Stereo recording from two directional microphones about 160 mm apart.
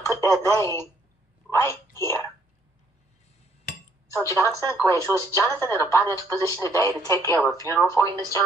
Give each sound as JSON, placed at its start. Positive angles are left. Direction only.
{"t": 0.0, "sound": "a sound", "side_deg": 20}
{"t": 0.4, "sound": "speech", "side_deg": 20}
{"t": 4.1, "sound": "speech", "side_deg": 20}
{"t": 4.5, "sound": "speech", "side_deg": -20}
{"t": 4.7, "sound": "speech", "side_deg": 20}